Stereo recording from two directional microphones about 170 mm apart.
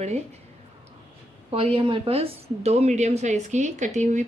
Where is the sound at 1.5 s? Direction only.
30° right (ahead or behind).